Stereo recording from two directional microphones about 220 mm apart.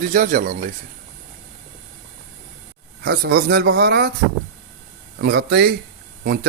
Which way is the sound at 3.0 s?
45° right (ahead or behind).